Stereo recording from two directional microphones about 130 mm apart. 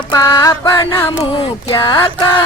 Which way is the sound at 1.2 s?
40° left (ahead or behind).